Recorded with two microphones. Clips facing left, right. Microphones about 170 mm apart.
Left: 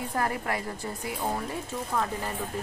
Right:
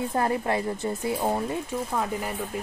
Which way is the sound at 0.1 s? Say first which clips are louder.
Right 3 dB; 25° right (ahead or behind).